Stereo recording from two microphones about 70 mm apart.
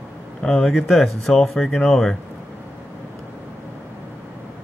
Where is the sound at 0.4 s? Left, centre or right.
Centre.